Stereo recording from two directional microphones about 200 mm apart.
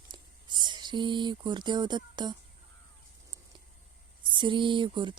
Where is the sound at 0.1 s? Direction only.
25° right (ahead or behind).